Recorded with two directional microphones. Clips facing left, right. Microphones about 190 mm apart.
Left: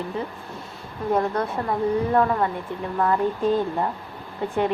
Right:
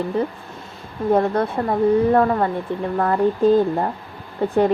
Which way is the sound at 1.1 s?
30° right (ahead or behind).